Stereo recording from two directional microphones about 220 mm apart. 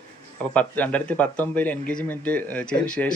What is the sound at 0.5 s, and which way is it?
Speech, 5° left (ahead or behind).